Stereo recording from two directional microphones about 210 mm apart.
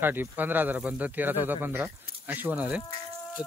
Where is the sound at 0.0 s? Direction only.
10° right (ahead or behind).